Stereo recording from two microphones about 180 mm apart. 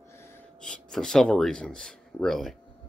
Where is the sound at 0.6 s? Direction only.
5° left (ahead or behind).